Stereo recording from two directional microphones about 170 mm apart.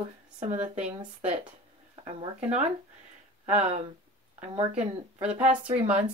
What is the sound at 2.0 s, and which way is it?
Speech, 35° right (ahead or behind).